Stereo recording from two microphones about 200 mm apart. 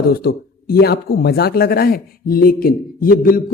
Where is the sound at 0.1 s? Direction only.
50° left (ahead or behind).